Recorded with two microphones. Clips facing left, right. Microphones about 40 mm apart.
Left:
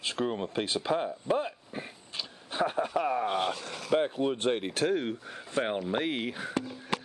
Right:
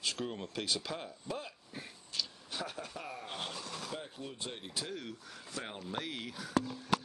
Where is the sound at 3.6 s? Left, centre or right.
Left.